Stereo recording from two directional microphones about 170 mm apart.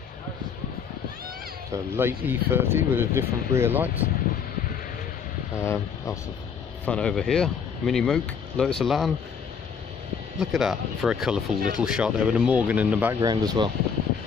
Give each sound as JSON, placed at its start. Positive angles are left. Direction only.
{"t": 1.7, "sound": "speech", "side_deg": -15}
{"t": 5.6, "sound": "speech", "side_deg": 15}
{"t": 6.9, "sound": "speech", "side_deg": 5}
{"t": 10.4, "sound": "speech", "side_deg": 0}
{"t": 13.2, "sound": "speech", "side_deg": -25}